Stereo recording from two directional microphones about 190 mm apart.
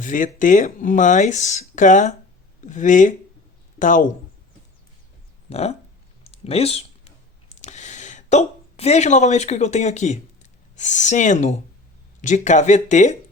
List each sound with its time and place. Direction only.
0.0 s speech: 45° left (ahead or behind)
5.5 s a sound: 35° left (ahead or behind)
7.6 s speech: 40° left (ahead or behind)